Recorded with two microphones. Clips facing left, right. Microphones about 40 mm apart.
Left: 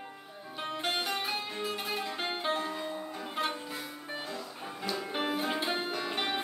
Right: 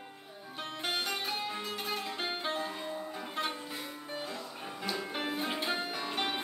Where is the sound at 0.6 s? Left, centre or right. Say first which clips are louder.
Left 2 dB; centre.